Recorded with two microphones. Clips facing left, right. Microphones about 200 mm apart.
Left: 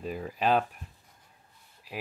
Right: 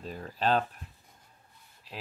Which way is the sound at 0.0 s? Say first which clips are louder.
Left 2 dB; 10° left (ahead or behind).